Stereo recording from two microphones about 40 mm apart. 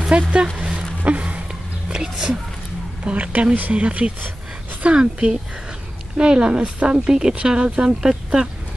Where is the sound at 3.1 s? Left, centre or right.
Right.